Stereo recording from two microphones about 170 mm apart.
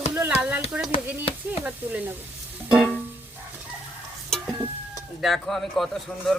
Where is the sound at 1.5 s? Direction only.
10° right (ahead or behind).